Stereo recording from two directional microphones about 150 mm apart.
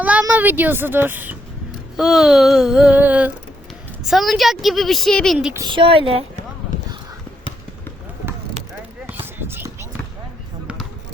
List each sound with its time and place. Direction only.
0.0 s a child's voice: 10° right (ahead or behind)
5.5 s speech: 30° right (ahead or behind)
9.2 s basketball bounce: 15° right (ahead or behind)